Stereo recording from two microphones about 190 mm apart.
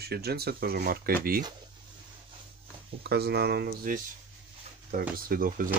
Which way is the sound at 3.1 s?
55° right (ahead or behind).